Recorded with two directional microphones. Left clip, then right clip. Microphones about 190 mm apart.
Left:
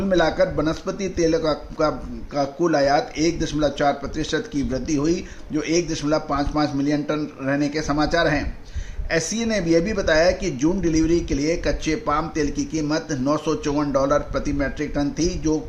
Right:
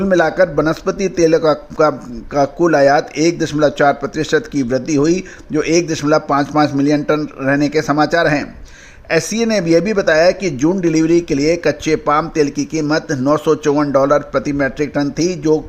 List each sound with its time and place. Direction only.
0.1 s a man's voice: 45° right (ahead or behind)